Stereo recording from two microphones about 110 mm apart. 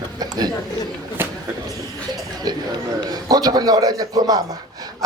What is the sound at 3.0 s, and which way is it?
A man's voice, 35° right (ahead or behind).